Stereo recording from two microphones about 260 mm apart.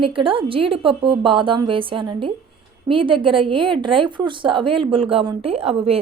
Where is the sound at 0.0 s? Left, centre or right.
Centre.